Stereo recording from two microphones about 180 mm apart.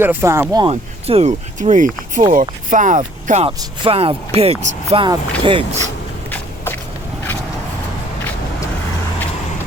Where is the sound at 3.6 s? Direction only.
30° right (ahead or behind).